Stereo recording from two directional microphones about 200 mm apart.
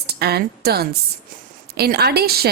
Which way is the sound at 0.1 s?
50° right (ahead or behind).